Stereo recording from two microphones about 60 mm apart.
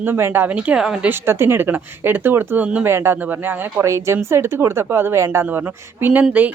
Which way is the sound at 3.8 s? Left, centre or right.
Right.